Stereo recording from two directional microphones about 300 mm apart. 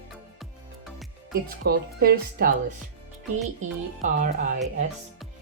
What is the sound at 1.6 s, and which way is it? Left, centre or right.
Speech, right.